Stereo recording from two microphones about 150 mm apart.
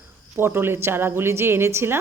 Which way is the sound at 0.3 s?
15° right (ahead or behind).